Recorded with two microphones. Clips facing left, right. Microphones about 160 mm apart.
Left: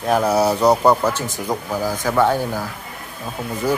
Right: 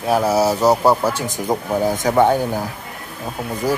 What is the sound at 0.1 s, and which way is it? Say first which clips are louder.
Speech: even; 5° right (ahead or behind).